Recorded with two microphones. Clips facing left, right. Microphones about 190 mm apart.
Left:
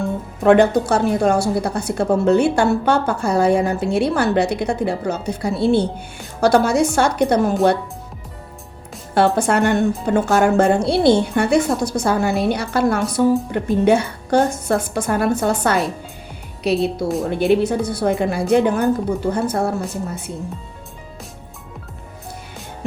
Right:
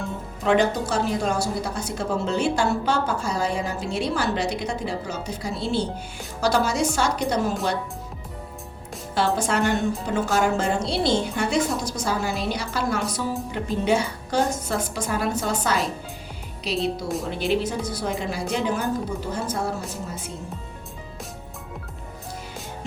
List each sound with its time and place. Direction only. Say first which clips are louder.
0.4 s a woman's voice: left 8 dB; 55° left (ahead or behind)
9.1 s a woman's voice: left 7 dB; 60° left (ahead or behind)